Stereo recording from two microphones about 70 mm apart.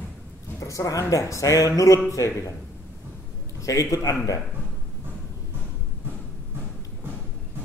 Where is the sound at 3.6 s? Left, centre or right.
Left.